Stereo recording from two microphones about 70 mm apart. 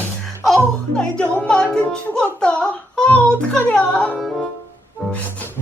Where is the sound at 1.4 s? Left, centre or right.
Centre.